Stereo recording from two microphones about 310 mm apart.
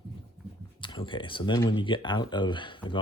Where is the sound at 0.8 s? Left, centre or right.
Centre.